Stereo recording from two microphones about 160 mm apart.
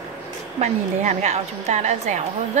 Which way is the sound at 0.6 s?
45° right (ahead or behind).